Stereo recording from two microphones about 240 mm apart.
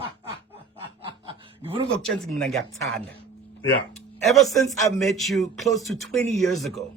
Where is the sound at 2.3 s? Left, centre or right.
Centre.